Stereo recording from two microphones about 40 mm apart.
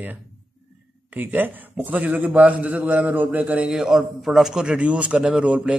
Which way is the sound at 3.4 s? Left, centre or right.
Right.